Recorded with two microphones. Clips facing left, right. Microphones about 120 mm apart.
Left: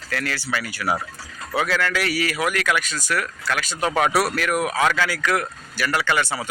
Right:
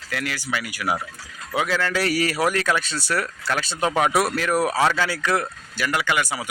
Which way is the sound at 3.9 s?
20° right (ahead or behind).